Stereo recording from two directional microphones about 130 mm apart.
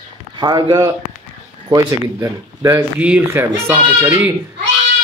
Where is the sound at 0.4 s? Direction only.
30° right (ahead or behind).